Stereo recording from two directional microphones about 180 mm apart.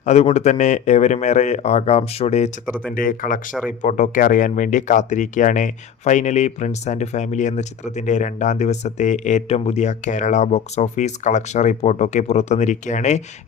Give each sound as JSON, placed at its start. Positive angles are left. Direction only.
{"t": 0.0, "sound": "speech", "side_deg": 40}
{"t": 2.9, "sound": "speech", "side_deg": 50}